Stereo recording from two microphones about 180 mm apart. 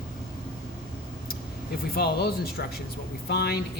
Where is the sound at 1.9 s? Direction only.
60° left (ahead or behind).